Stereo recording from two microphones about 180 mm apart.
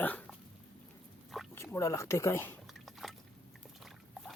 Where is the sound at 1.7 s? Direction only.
15° left (ahead or behind).